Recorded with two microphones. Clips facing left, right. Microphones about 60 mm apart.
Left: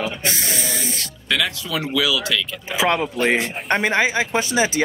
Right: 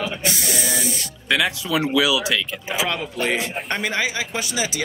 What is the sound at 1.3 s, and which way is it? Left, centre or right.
Speech, centre.